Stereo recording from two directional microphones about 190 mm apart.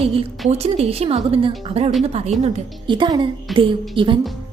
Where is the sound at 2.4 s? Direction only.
25° right (ahead or behind).